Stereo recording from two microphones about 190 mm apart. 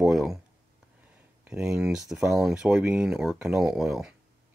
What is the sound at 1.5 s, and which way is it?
Speech, 5° right (ahead or behind).